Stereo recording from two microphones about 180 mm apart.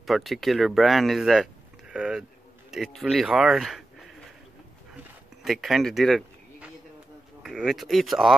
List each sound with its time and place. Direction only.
0.0 s speech: centre (ahead or behind)
5.4 s speech: centre (ahead or behind)